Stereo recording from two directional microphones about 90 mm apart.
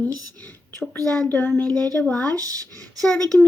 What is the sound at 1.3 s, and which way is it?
Speech, 20° left (ahead or behind).